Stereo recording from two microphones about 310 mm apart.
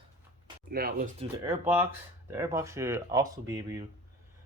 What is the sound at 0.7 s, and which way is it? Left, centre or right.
Speech, right.